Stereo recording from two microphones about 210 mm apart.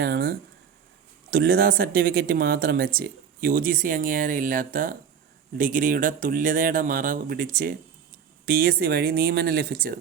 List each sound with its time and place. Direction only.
0.0 s speech: 50° right (ahead or behind)